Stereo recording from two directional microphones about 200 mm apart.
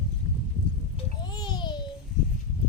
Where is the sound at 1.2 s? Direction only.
20° left (ahead or behind).